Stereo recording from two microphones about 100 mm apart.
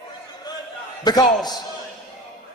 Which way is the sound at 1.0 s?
45° left (ahead or behind).